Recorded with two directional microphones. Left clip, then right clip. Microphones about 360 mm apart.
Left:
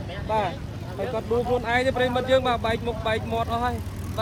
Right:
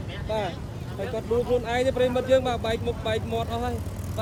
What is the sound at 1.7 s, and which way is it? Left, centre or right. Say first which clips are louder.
Speech: left 1 dB; centre.